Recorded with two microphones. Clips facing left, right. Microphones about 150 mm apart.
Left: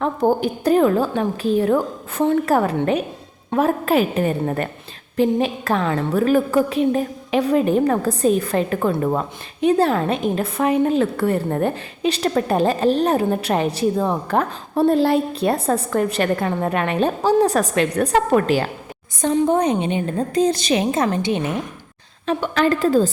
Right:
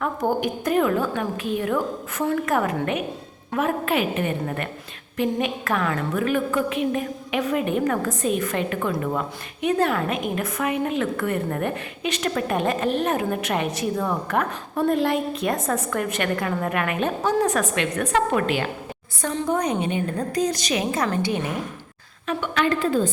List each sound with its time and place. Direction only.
0.0 s a woman's voice: 30° left (ahead or behind)
19.2 s a woman's voice: 25° left (ahead or behind)
22.3 s a woman's voice: 35° left (ahead or behind)